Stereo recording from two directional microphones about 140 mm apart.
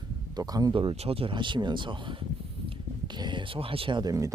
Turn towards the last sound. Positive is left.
turn(degrees=-25)  # may be behind; listen again after turning